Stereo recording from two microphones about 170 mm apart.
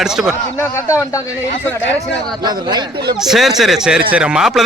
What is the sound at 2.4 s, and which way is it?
Speech, 25° right (ahead or behind).